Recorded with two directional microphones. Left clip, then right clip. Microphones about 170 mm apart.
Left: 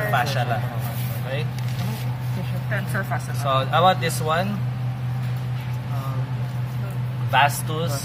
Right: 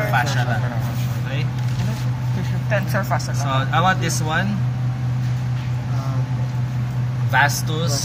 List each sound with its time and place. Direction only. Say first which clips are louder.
0.1 s a sound: right 1 dB; 40° left (ahead or behind)
2.7 s speech: right 5 dB; 30° right (ahead or behind)
3.4 s speech: left 2 dB; 30° left (ahead or behind)
7.3 s speech: right 1 dB; 5° left (ahead or behind)